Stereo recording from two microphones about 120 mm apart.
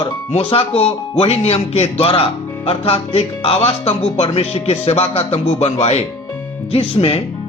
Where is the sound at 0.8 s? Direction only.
55° left (ahead or behind).